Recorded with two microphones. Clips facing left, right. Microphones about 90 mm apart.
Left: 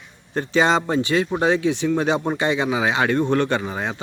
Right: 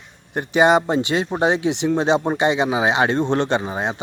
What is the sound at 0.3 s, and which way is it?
A man's voice, 15° right (ahead or behind).